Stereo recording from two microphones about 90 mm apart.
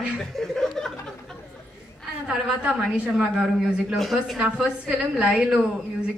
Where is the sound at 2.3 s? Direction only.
10° right (ahead or behind).